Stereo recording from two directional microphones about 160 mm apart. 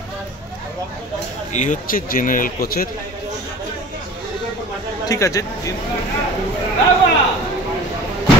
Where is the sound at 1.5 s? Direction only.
50° left (ahead or behind); by 2.9 s 70° left (ahead or behind).